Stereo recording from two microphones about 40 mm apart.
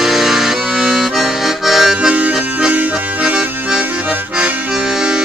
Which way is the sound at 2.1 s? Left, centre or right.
Right.